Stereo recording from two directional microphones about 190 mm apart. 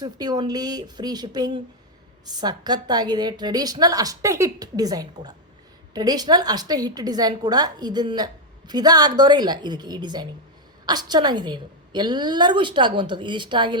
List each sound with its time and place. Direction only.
0.0 s a woman's voice: 20° right (ahead or behind)